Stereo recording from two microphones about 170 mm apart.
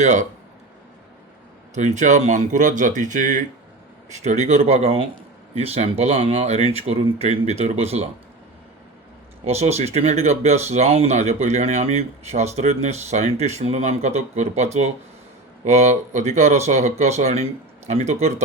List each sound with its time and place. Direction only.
0.0 s speech: 45° right (ahead or behind)
1.7 s speech: 45° right (ahead or behind)
9.5 s speech: 40° right (ahead or behind)